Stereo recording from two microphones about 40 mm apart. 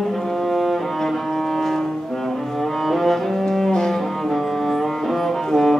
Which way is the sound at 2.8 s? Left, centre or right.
Centre.